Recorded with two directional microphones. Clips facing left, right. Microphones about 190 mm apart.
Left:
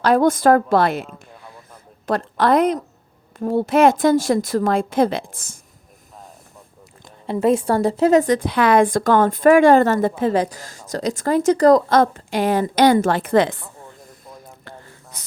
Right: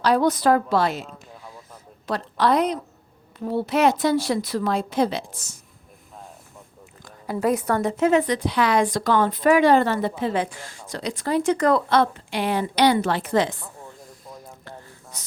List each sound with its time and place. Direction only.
0.0 s a woman's voice: 50° left (ahead or behind)
2.0 s a woman's voice: 50° left (ahead or behind)
7.0 s a woman's voice: 25° left (ahead or behind); by 13.6 s 55° left (ahead or behind)